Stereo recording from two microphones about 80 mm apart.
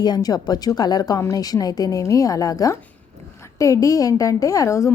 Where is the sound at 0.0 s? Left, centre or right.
Left.